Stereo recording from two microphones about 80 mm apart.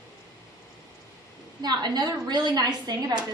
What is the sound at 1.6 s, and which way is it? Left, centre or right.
A woman's voice, right.